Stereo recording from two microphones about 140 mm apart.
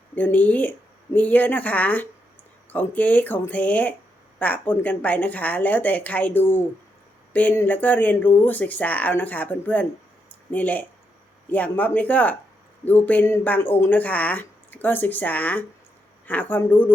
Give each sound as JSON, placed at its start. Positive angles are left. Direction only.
{"t": 0.2, "sound": "speech", "side_deg": 10}
{"t": 10.2, "sound": "a sound", "side_deg": 10}
{"t": 11.4, "sound": "speech", "side_deg": 10}